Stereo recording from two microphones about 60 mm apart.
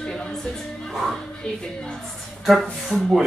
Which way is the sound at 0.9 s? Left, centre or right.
Centre.